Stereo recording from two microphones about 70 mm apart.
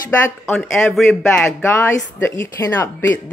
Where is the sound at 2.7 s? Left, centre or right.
Left.